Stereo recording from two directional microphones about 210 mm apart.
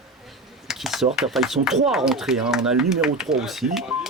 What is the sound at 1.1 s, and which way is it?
Speech, centre (ahead or behind).